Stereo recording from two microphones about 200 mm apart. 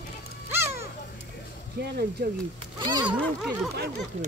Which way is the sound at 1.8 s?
55° right (ahead or behind).